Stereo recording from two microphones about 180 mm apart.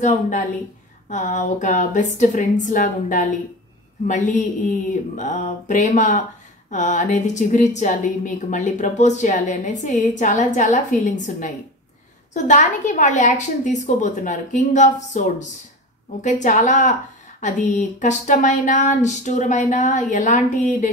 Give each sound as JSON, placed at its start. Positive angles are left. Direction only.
{"t": 0.0, "sound": "speech", "side_deg": 45}